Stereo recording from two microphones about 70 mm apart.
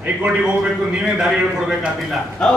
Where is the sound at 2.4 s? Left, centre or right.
Centre.